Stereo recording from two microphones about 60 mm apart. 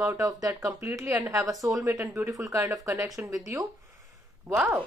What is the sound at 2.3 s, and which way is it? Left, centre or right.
Speech, right.